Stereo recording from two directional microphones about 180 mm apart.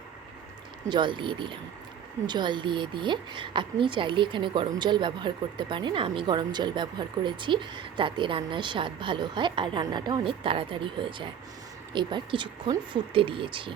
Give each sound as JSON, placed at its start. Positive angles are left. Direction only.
{"t": 0.9, "sound": "a woman's voice", "side_deg": -25}